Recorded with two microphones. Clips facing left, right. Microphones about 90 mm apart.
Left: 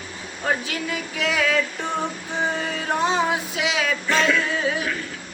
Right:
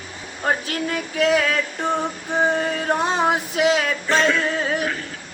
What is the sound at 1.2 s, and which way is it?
Speech, 45° right (ahead or behind).